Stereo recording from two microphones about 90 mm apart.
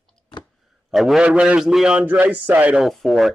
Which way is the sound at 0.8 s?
5° right (ahead or behind).